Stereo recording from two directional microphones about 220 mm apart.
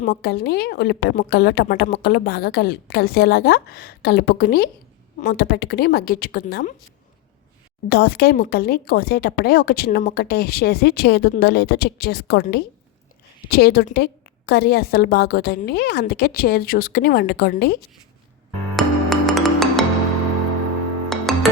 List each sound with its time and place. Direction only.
0.1 s speech: 50° left (ahead or behind)
7.9 s speech: 45° left (ahead or behind)
18.8 s music: centre (ahead or behind)
21.3 s music: centre (ahead or behind)